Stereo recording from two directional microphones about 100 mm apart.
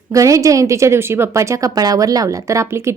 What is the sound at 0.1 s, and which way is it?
A woman's voice, 35° right (ahead or behind).